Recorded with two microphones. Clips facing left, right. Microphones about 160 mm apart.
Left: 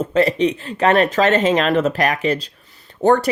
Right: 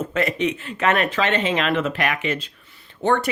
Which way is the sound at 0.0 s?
30° left (ahead or behind).